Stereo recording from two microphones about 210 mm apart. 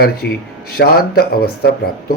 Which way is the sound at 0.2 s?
50° left (ahead or behind).